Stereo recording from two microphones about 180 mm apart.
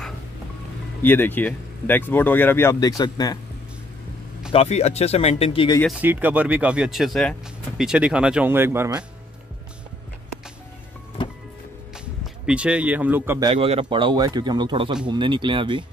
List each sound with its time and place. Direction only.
1.0 s speech: 10° left (ahead or behind)
4.5 s speech: 35° left (ahead or behind)
5.9 s speech: 10° right (ahead or behind)
12.0 s speech: 5° right (ahead or behind)
13.4 s speech: 30° right (ahead or behind)